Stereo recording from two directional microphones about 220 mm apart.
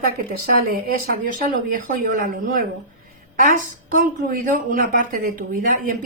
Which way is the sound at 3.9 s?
40° right (ahead or behind).